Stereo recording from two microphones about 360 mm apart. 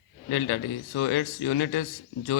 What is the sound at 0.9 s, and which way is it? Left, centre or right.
Speech, left.